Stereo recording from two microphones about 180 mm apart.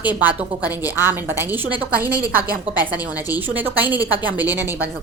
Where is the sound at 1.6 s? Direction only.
30° right (ahead or behind).